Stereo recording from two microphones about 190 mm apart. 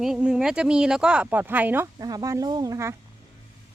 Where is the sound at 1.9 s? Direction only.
20° right (ahead or behind).